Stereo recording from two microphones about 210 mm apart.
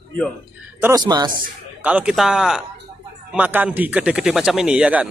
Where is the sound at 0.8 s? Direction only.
15° right (ahead or behind).